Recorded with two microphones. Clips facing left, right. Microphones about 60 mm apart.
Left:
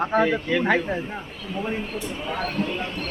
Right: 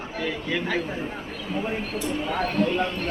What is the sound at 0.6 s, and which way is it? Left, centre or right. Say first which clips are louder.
Speech: left 5 dB; left.